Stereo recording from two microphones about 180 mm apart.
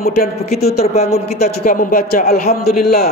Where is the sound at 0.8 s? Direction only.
35° left (ahead or behind).